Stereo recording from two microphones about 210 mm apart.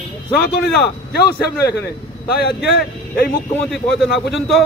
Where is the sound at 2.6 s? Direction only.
50° left (ahead or behind).